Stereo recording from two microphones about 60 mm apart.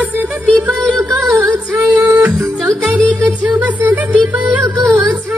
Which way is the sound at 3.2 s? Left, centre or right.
Right.